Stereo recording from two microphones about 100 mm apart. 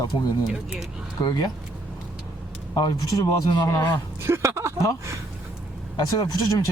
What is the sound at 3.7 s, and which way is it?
Speech, 20° left (ahead or behind).